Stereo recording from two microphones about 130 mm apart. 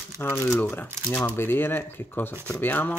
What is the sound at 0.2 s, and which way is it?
Speech, 15° left (ahead or behind).